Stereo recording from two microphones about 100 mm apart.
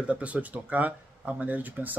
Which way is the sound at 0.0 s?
15° right (ahead or behind).